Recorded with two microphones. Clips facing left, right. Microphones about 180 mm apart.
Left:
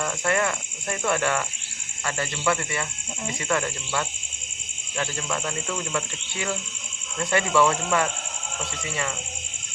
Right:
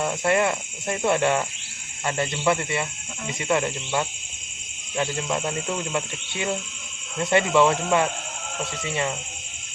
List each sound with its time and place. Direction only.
0.0 s speech: 25° right (ahead or behind)